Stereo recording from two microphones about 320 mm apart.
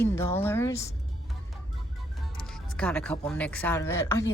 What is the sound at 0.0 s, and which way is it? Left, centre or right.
Speech, centre.